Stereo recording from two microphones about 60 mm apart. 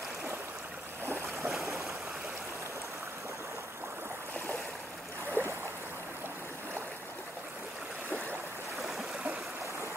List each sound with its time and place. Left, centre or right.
1.0 s boat: right
1.5 s stream: centre
5.4 s boat: right